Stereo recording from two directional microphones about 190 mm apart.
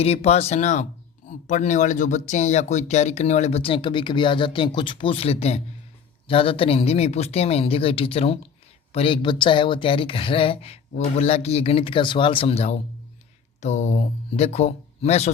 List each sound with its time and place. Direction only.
0.0 s speech: 35° left (ahead or behind)